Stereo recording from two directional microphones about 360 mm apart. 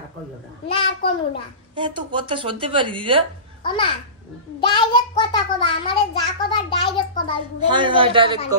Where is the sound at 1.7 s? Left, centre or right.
Centre.